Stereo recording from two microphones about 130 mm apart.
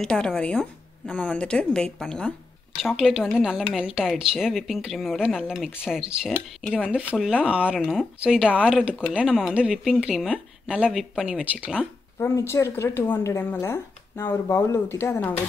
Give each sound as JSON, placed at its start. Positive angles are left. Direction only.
{"t": 0.0, "sound": "speech", "side_deg": 5}
{"t": 12.2, "sound": "speech", "side_deg": 20}